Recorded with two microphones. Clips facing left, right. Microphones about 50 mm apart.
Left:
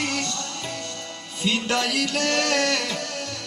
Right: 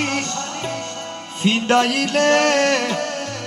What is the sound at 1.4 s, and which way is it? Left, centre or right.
Music, right.